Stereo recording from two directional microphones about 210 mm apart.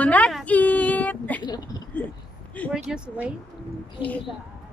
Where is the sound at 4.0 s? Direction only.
5° right (ahead or behind).